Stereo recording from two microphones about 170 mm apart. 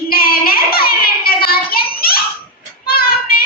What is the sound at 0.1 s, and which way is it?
Child singing, 60° left (ahead or behind).